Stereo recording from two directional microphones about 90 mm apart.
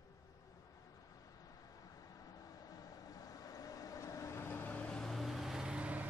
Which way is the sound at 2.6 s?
45° left (ahead or behind).